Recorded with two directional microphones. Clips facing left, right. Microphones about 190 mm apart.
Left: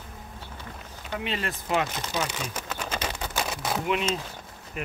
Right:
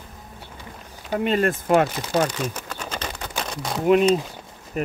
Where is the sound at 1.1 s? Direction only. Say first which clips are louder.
Right 10 dB; 45° right (ahead or behind).